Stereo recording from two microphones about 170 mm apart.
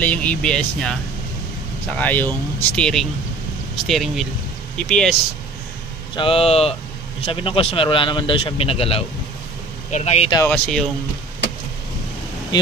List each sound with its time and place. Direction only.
0.0 s speech: 10° left (ahead or behind)
6.1 s a man's voice: 35° left (ahead or behind)
10.5 s speech: 5° left (ahead or behind)